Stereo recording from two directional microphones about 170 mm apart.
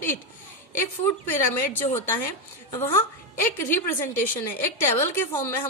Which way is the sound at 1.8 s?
35° left (ahead or behind).